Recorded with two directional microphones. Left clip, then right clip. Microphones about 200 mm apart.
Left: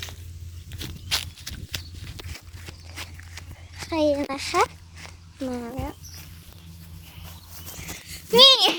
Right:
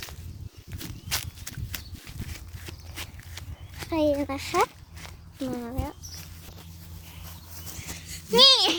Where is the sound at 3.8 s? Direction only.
Centre (ahead or behind).